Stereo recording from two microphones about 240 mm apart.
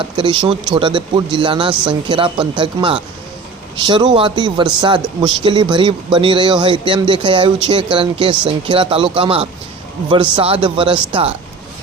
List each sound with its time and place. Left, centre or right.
0.0 s speech: right